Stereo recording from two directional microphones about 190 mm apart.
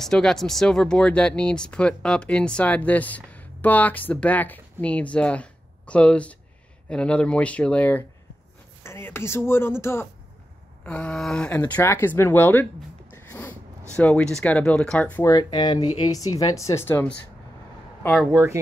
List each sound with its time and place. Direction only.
0.0 s speech: 5° left (ahead or behind)
13.1 s a sound: 10° left (ahead or behind)
13.9 s speech: 5° left (ahead or behind)
15.3 s speech: 20° left (ahead or behind)
18.0 s speech: 5° right (ahead or behind)